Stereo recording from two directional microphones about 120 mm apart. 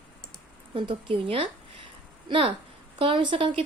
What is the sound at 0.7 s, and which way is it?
Speech, 45° right (ahead or behind).